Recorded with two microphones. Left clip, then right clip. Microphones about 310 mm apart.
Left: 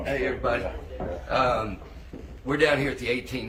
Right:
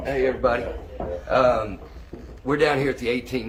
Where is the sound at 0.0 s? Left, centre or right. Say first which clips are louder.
Right 5 dB; centre.